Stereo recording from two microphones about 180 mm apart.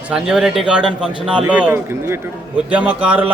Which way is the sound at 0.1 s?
5° right (ahead or behind).